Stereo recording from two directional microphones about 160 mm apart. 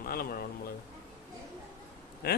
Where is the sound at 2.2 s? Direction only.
85° left.